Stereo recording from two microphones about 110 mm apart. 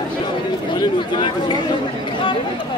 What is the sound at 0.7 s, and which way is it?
Speech, 45° left (ahead or behind).